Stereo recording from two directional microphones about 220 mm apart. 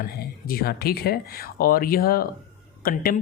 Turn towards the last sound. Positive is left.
turn(degrees=40)  # may be behind; listen again after turning